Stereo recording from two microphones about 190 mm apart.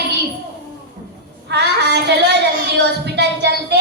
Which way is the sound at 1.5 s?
65° right (ahead or behind).